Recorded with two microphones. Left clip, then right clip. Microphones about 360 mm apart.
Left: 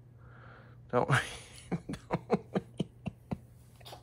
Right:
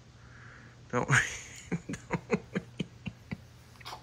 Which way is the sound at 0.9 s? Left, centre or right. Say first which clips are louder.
Right 2 dB; centre.